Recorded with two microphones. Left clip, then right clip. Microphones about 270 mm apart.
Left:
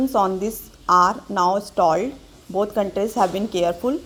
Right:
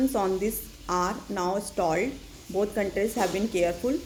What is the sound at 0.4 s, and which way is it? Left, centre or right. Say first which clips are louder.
A woman's voice: left 8 dB; left.